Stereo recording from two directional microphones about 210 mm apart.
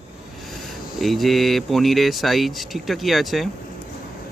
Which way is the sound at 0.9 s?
Centre (ahead or behind).